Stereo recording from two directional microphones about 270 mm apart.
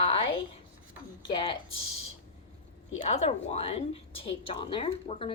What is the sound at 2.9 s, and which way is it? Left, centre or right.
A woman's voice, left.